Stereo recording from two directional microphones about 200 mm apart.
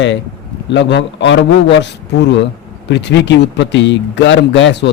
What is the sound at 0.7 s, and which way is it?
Speech, 60° left (ahead or behind).